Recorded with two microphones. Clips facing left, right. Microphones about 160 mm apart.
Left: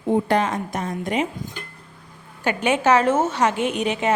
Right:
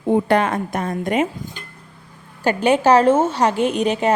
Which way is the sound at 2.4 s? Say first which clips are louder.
Right 4 dB; 35° right (ahead or behind).